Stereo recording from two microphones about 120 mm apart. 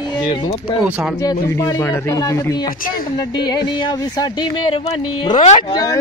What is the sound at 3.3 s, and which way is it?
Speech, 35° left (ahead or behind).